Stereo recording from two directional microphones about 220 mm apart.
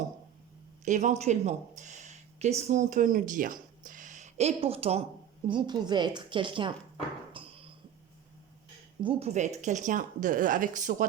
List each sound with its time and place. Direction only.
0.9 s a woman's voice: 35° right (ahead or behind)
7.3 s a sound: 25° right (ahead or behind)
9.0 s speech: 25° right (ahead or behind)